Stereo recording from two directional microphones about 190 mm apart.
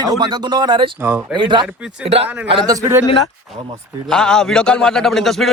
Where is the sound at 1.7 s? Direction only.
5° right (ahead or behind).